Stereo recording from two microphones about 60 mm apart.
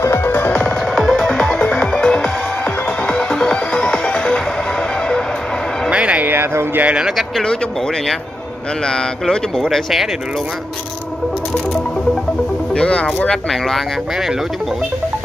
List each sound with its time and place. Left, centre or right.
0.0 s music: left
0.5 s music: left
0.9 s music: centre
5.9 s a sound: centre
6.3 s a sound: right
8.8 s speech: centre
12.7 s speech: centre
13.5 s speech: centre